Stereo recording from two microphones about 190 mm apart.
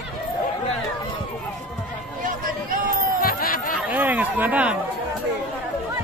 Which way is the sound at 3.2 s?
50° left (ahead or behind).